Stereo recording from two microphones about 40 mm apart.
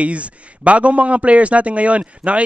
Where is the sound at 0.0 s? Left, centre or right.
Right.